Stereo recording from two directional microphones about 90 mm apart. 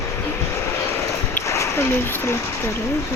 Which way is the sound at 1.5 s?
30° left (ahead or behind).